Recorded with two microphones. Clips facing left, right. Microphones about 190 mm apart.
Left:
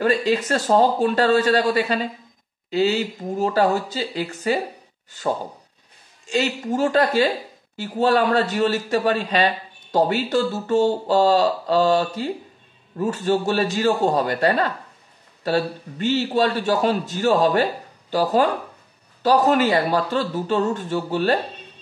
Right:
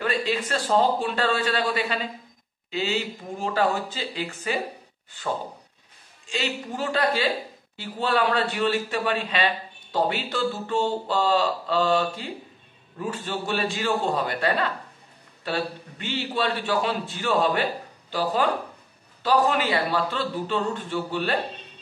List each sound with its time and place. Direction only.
0.0 s a man's voice: 40° left (ahead or behind)
6.2 s a man's voice: 45° left (ahead or behind)